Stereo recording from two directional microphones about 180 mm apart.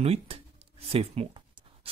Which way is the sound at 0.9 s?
35° right (ahead or behind).